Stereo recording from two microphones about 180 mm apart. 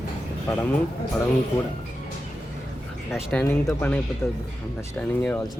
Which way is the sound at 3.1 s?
5° left (ahead or behind).